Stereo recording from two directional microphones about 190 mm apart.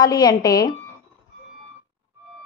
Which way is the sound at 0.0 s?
20° left (ahead or behind).